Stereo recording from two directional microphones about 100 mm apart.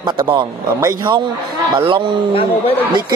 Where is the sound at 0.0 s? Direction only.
50° right (ahead or behind).